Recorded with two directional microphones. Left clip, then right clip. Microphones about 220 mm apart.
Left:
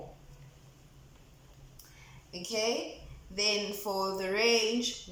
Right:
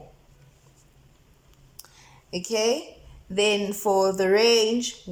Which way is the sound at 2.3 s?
45° right (ahead or behind).